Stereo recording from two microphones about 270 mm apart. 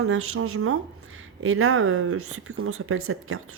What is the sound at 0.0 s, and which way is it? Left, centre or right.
Speech, right.